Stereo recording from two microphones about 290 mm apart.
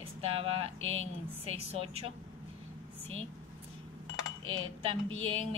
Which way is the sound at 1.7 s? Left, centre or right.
Centre.